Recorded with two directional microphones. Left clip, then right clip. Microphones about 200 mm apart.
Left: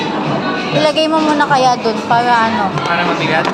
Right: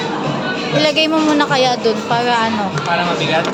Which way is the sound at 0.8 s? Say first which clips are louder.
Left 1 dB; 20° right (ahead or behind).